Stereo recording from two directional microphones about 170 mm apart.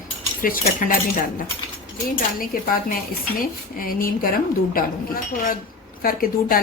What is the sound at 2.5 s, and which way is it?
Speech, 55° left (ahead or behind).